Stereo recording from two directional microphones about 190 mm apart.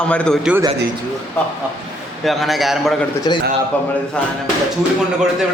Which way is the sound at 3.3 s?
25° left (ahead or behind).